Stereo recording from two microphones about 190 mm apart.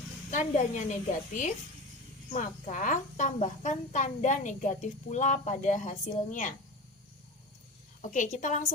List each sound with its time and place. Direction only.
0.3 s a woman's voice: 40° left (ahead or behind)
2.3 s a woman's voice: 40° left (ahead or behind)
8.0 s a woman's voice: 40° left (ahead or behind)